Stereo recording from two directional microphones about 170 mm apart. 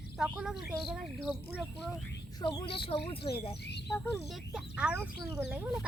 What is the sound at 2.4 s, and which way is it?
Speech, 25° left (ahead or behind).